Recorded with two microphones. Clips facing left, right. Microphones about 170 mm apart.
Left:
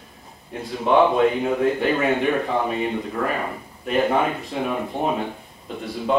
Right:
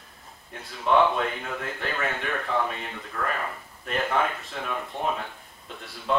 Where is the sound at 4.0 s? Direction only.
15° left (ahead or behind).